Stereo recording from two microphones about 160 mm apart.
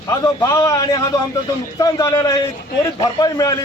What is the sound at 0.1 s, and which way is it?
A man's voice, 25° left (ahead or behind).